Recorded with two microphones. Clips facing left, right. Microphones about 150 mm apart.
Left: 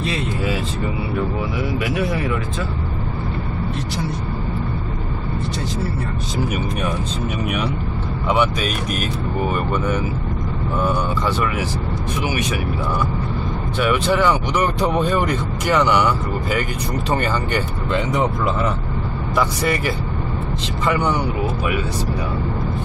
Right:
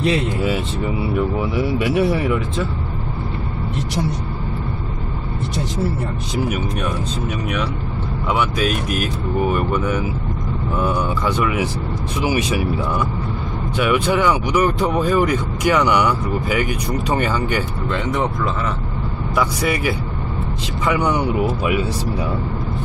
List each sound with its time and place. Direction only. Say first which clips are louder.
1.6 s speech: right 5 dB; 30° right (ahead or behind)
8.3 s speech: even; centre (ahead or behind)
13.7 s speech: right 1 dB; 15° right (ahead or behind)
17.9 s speech: left 2 dB; 5° left (ahead or behind)
19.3 s speech: even; 10° right (ahead or behind)